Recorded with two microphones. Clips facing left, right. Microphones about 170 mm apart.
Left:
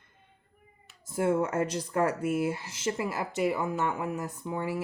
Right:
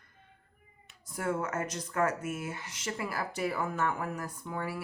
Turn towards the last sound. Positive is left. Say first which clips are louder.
# left 4 dB
turn(degrees=20)  # may be behind; listen again after turning